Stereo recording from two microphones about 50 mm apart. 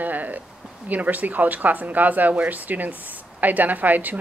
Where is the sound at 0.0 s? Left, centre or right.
Right.